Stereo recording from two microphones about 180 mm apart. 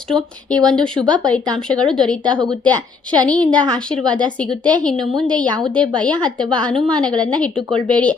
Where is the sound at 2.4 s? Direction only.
25° right (ahead or behind).